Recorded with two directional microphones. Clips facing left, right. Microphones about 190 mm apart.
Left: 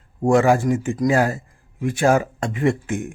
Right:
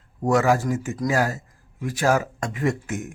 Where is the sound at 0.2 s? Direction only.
30° left (ahead or behind).